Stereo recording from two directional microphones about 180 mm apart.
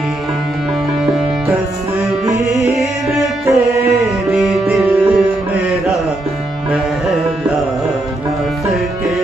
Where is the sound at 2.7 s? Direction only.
Centre (ahead or behind).